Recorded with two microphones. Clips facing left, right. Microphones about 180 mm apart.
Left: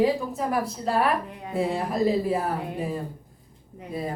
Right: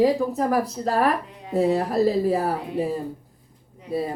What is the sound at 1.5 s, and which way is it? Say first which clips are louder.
Speech: right 5 dB; 40° right (ahead or behind).